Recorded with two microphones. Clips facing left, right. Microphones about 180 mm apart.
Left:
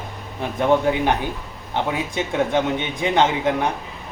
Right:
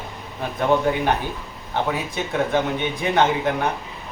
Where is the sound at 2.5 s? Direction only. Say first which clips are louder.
Left 1 dB; 20° left (ahead or behind).